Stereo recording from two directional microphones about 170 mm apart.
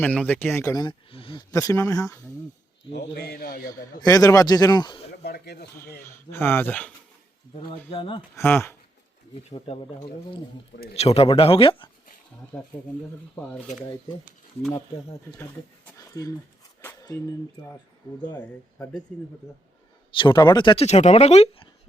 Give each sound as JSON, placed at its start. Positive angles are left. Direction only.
{"t": 0.0, "sound": "speech", "side_deg": 10}
{"t": 2.9, "sound": "a man's voice", "side_deg": 70}
{"t": 4.0, "sound": "speech", "side_deg": 20}
{"t": 5.1, "sound": "speech", "side_deg": 70}
{"t": 6.0, "sound": "speech", "side_deg": 15}
{"t": 7.5, "sound": "speech", "side_deg": 35}
{"t": 8.4, "sound": "speech", "side_deg": 15}
{"t": 9.5, "sound": "speech", "side_deg": 35}
{"t": 10.9, "sound": "speech", "side_deg": 35}
{"t": 14.7, "sound": "speech", "side_deg": 15}
{"t": 16.0, "sound": "dog", "side_deg": 20}
{"t": 16.8, "sound": "speech", "side_deg": 20}
{"t": 20.1, "sound": "speech", "side_deg": 30}
{"t": 20.8, "sound": "speech", "side_deg": 40}